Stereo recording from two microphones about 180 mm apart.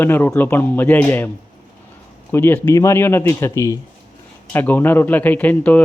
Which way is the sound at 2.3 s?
10° left (ahead or behind).